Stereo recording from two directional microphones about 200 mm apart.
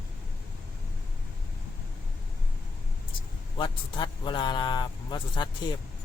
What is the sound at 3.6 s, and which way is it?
A man's voice, 25° left (ahead or behind).